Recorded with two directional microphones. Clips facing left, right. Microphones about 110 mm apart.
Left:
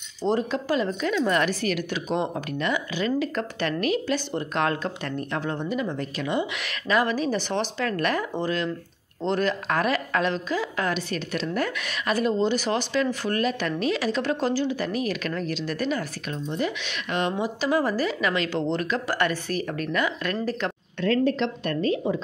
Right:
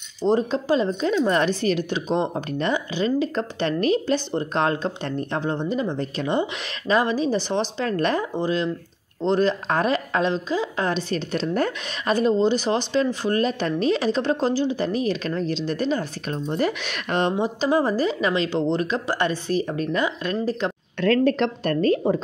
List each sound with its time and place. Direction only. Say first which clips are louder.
0.4 s a woman's voice: right 4 dB; 25° right (ahead or behind)
16.4 s speech: right 4 dB; 45° right (ahead or behind)
17.3 s a woman's voice: right 2 dB; 25° right (ahead or behind)
21.0 s speech: right 3 dB; 70° right (ahead or behind)
21.6 s speech: right 5 dB; 45° right (ahead or behind)